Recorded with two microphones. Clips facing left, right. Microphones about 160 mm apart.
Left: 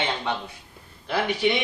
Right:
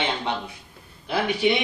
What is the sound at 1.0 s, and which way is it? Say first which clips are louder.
Speech: right 1 dB; 10° right (ahead or behind).